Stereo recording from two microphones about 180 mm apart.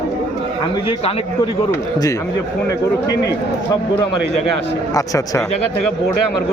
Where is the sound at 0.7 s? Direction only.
30° left (ahead or behind).